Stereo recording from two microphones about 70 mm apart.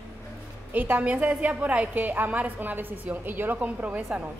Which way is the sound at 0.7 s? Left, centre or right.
Right.